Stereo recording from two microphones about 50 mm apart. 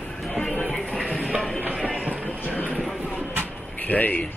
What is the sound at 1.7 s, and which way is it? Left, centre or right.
Run, centre.